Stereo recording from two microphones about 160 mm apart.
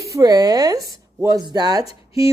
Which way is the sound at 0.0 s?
20° right (ahead or behind).